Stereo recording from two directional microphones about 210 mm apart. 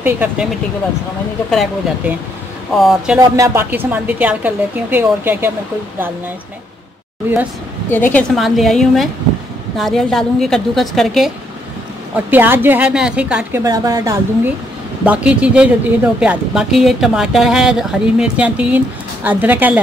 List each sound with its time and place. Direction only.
0.0 s speech: 10° right (ahead or behind)
1.5 s speech: centre (ahead or behind)
3.2 s speech: 15° right (ahead or behind)
7.9 s speech: 10° left (ahead or behind)
13.7 s speech: 15° right (ahead or behind)